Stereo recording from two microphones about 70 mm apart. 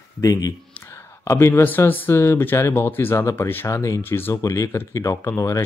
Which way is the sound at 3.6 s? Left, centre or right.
Left.